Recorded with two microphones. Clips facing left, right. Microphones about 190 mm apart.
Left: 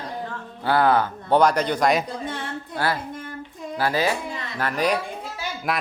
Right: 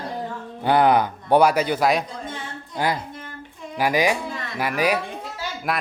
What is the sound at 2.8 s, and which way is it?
Speech, 15° right (ahead or behind).